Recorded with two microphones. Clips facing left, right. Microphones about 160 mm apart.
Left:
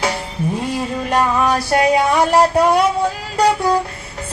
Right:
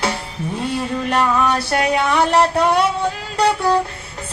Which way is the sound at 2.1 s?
10° left (ahead or behind).